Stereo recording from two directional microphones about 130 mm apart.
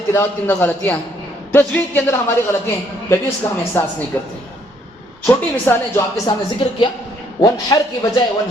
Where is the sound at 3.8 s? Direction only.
15° left (ahead or behind).